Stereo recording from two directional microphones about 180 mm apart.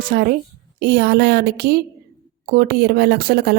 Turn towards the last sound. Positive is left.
turn(degrees=-60)  # may be behind; listen again after turning